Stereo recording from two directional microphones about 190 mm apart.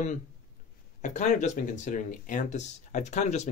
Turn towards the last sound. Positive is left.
turn(degrees=35)  # may be behind; listen again after turning